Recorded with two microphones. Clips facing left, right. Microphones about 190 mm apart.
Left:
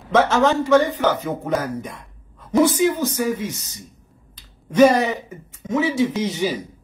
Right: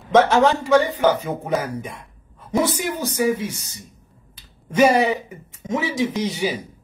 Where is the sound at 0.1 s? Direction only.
15° right (ahead or behind).